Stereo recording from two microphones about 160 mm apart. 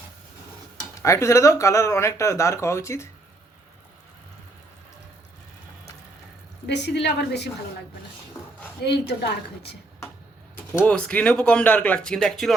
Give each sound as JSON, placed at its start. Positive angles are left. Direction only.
{"t": 1.0, "sound": "speech", "side_deg": 20}
{"t": 6.7, "sound": "a woman's voice", "side_deg": 90}
{"t": 8.8, "sound": "a woman's voice", "side_deg": 90}
{"t": 10.8, "sound": "speech", "side_deg": 10}